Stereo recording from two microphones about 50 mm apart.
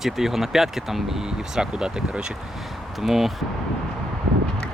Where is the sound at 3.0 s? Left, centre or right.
Centre.